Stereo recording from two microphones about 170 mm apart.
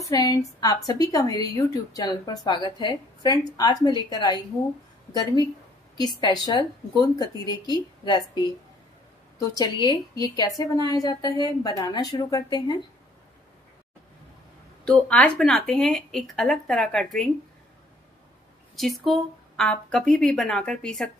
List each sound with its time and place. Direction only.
0.0 s a woman's voice: 20° left (ahead or behind)
5.9 s a woman's voice: 25° left (ahead or behind)
9.4 s a woman's voice: 25° left (ahead or behind)
14.9 s speech: 5° left (ahead or behind)
18.8 s speech: centre (ahead or behind)